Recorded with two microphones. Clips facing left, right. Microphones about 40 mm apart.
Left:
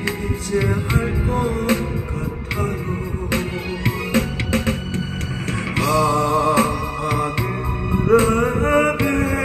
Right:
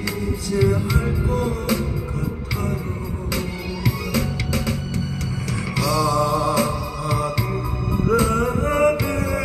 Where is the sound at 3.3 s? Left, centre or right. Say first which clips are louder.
Left 4 dB; left.